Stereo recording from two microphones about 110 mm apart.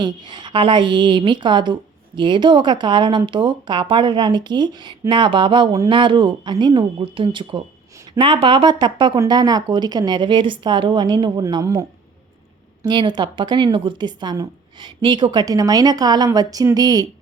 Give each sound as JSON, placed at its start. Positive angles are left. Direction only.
{"t": 0.0, "sound": "a woman's voice", "side_deg": -45}
{"t": 11.6, "sound": "a woman's voice", "side_deg": -30}
{"t": 12.8, "sound": "a woman's voice", "side_deg": -45}